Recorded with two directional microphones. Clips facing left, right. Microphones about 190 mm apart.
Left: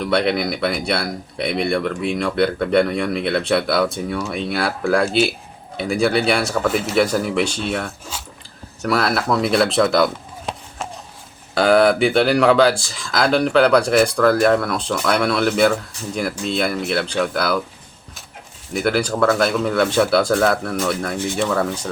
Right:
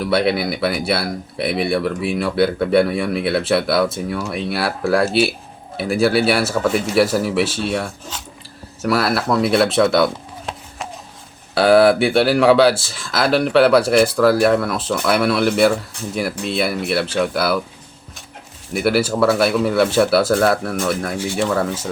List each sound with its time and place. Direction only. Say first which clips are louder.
0.0 s speech: right 1 dB; 5° right (ahead or behind)
18.7 s speech: right 2 dB; 5° right (ahead or behind)